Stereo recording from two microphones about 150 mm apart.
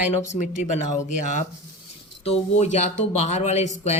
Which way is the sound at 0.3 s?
55° left (ahead or behind).